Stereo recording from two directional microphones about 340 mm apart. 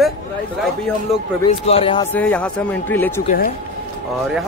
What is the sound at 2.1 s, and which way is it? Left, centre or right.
Speech, centre.